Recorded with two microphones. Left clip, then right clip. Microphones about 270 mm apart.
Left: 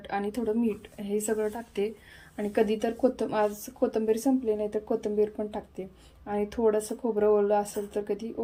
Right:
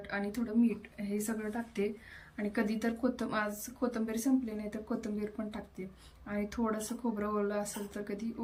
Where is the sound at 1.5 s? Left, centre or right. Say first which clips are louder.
Left 5 dB; centre.